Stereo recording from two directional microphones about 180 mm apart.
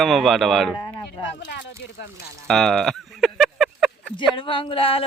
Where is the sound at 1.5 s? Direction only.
70° left (ahead or behind).